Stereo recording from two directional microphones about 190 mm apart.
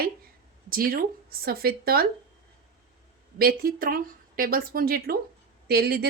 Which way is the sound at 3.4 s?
50° right (ahead or behind).